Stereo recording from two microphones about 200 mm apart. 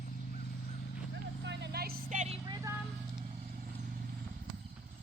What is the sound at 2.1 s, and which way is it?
Vehicle, 35° right (ahead or behind).